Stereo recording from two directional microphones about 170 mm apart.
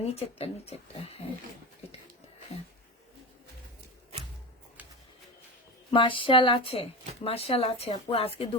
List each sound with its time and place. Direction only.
0.0 s speech: 35° left (ahead or behind)
5.9 s speech: 30° left (ahead or behind)